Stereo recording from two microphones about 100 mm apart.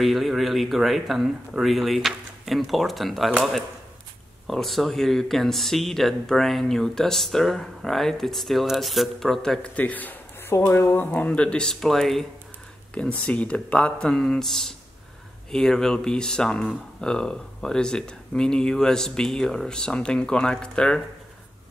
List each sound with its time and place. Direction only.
0.0 s speech: centre (ahead or behind)
4.5 s speech: centre (ahead or behind)